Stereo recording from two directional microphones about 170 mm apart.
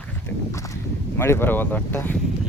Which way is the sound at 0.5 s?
20° left (ahead or behind).